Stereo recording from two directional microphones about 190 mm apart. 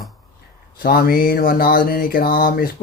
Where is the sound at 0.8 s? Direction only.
50° left (ahead or behind).